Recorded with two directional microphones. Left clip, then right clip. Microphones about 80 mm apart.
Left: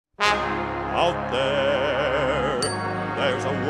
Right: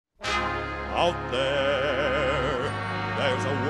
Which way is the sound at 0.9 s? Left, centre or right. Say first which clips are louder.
Left 2 dB; right.